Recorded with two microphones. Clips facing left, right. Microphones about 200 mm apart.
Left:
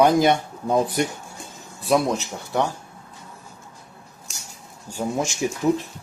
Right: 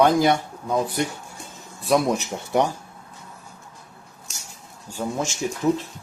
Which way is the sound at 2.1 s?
15° right (ahead or behind).